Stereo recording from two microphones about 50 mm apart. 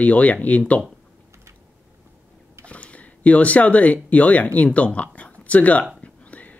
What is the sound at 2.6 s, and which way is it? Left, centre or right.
Speech, left.